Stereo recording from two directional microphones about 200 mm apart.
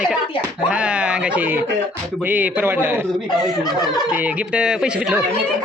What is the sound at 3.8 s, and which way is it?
Speech, 20° left (ahead or behind).